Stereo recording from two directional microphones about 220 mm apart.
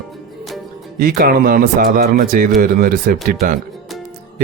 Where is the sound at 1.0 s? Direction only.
40° right (ahead or behind).